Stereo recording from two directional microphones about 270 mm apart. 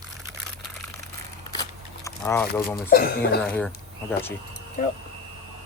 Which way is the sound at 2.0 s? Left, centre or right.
Centre.